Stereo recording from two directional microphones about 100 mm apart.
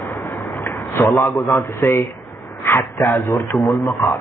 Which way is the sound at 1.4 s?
30° left (ahead or behind).